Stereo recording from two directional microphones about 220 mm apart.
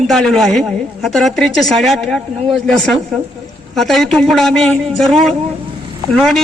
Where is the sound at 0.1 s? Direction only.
Centre (ahead or behind).